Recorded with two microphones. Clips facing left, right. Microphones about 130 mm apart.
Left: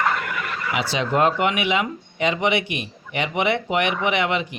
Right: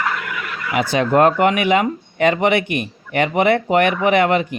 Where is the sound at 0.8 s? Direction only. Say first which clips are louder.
Right 6 dB; 50° right (ahead or behind).